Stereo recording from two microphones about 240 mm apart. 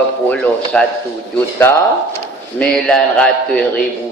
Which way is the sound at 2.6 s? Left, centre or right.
Centre.